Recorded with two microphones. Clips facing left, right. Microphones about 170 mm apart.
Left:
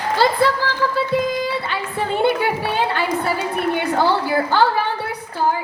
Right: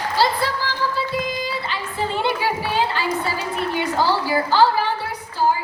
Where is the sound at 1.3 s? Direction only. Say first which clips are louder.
Left 4 dB; 60° left (ahead or behind).